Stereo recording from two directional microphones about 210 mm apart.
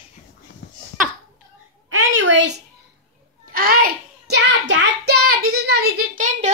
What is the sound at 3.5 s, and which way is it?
Child singing, 45° right (ahead or behind).